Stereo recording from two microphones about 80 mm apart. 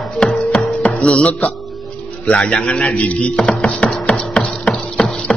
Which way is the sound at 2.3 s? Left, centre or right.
Centre.